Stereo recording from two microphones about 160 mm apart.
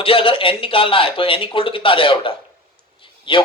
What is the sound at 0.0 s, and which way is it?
A man's voice, 35° left (ahead or behind).